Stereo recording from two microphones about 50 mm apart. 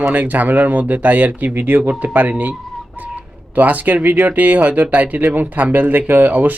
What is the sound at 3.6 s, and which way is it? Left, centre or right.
Speech, right.